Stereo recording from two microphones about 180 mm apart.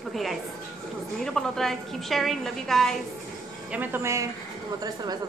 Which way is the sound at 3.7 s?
10° right (ahead or behind).